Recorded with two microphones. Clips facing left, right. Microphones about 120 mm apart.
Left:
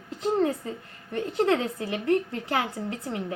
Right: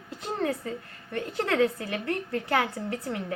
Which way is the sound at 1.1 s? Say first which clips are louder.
Left 3 dB; 30° left (ahead or behind).